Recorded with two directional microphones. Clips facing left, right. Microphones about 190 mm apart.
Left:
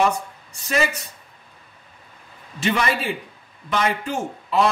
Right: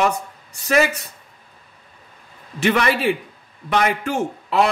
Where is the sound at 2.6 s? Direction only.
70° right (ahead or behind).